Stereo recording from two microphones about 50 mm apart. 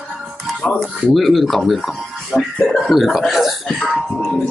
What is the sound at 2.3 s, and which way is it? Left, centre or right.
Speech, centre.